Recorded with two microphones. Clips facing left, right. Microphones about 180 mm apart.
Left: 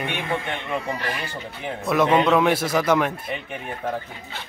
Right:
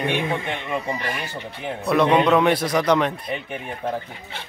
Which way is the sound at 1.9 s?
5° left (ahead or behind).